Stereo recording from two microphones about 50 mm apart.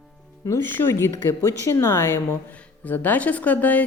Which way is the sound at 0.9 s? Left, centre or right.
Left.